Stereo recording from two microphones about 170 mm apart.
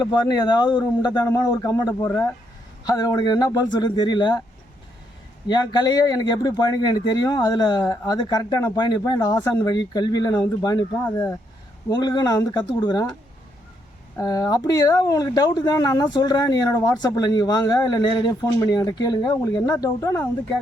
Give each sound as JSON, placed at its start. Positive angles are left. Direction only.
{"t": 0.0, "sound": "speech", "side_deg": 25}
{"t": 5.5, "sound": "speech", "side_deg": 25}
{"t": 14.2, "sound": "speech", "side_deg": 20}